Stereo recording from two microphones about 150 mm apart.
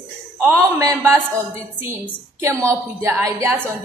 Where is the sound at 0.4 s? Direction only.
20° right (ahead or behind).